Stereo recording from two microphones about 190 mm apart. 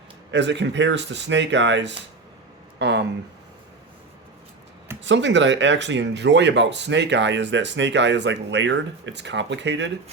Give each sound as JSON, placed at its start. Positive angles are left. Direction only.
{"t": 0.3, "sound": "speech", "side_deg": -70}
{"t": 2.7, "sound": "a sound", "side_deg": -65}
{"t": 5.0, "sound": "speech", "side_deg": -70}